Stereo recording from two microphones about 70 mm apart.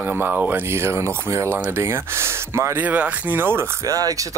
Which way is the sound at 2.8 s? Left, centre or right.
Right.